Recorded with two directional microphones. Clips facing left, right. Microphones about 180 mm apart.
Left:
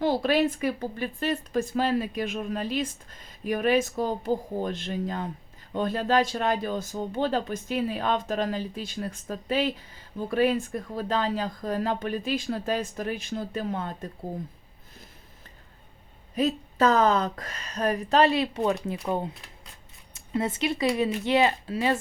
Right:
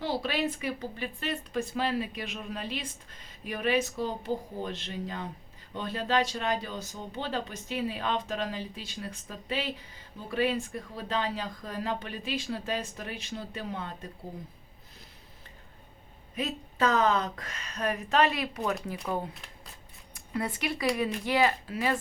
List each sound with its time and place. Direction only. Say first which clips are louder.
0.0 s speech: left 7 dB; 50° left (ahead or behind)
16.3 s speech: left 8 dB; 40° left (ahead or behind)